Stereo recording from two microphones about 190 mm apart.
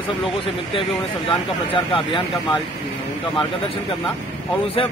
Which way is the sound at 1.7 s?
25° left (ahead or behind).